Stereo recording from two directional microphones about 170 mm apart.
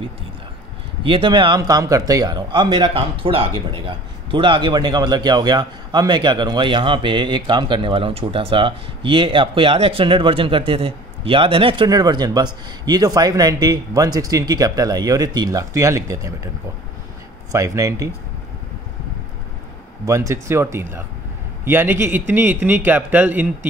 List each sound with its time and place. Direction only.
1.0 s speech: 30° right (ahead or behind)
17.5 s speech: 20° right (ahead or behind)
20.1 s a man's voice: 15° right (ahead or behind)